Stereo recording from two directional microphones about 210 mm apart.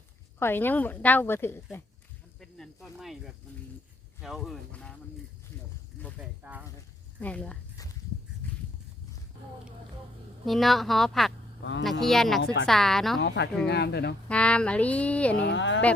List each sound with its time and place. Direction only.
0.3 s a woman's voice: 10° left (ahead or behind)
6.1 s speech: 5° right (ahead or behind)
7.2 s speech: 5° left (ahead or behind)
8.4 s a sound: 10° left (ahead or behind)
10.4 s speech: centre (ahead or behind)
13.2 s speech: 55° left (ahead or behind)
14.3 s a woman's voice: 5° left (ahead or behind)
15.4 s speech: 60° left (ahead or behind)